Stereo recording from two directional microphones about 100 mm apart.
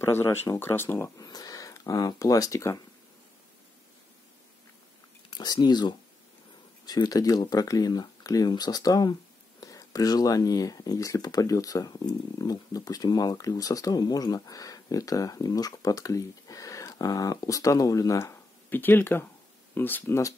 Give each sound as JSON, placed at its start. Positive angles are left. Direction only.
{"t": 0.0, "sound": "speech", "side_deg": 25}
{"t": 5.3, "sound": "speech", "side_deg": 45}